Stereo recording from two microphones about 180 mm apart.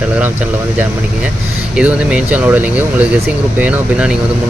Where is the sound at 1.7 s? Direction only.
5° right (ahead or behind).